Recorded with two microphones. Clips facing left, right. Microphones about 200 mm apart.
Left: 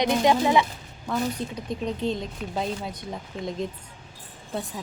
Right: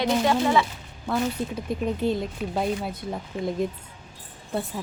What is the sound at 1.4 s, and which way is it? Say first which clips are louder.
Speech: right 2 dB; 10° right (ahead or behind).